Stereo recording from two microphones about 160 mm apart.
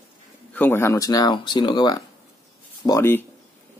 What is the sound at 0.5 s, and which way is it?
Speech, 10° left (ahead or behind).